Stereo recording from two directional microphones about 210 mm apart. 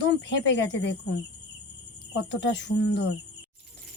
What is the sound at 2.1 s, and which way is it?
Speech, 55° left (ahead or behind).